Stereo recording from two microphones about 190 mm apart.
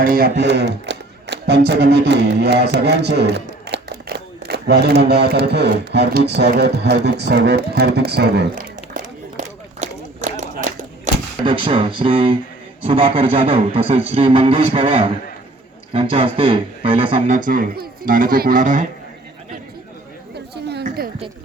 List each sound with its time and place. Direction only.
0.0 s speech: 50° right (ahead or behind)
5.0 s music: 60° right (ahead or behind); by 11.1 s 40° right (ahead or behind)
11.4 s speech: 25° right (ahead or behind)
17.2 s speech: 45° right (ahead or behind)
20.8 s a sound: 50° right (ahead or behind)